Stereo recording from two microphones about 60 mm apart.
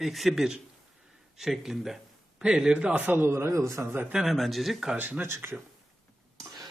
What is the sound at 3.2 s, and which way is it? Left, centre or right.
Speech, right.